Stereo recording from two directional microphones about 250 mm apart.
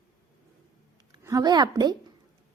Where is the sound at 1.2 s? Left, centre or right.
Centre.